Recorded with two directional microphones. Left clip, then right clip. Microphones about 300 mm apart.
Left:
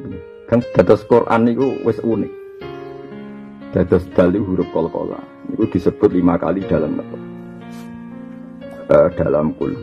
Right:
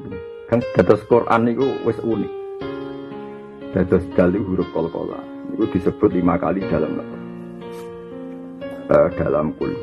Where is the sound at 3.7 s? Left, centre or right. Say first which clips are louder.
Left 3 dB; left.